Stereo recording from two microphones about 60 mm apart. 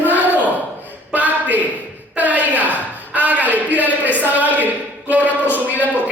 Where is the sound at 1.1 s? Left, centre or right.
Right.